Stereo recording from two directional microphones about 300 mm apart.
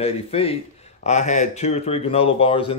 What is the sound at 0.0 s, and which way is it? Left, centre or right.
Speech, centre.